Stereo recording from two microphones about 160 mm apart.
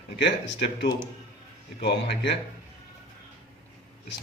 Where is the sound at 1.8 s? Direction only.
90° left.